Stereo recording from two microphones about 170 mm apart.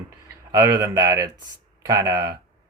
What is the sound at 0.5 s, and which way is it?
Speech, 20° right (ahead or behind).